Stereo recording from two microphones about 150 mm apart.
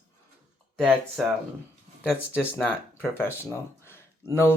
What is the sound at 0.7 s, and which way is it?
Speech, 5° left (ahead or behind).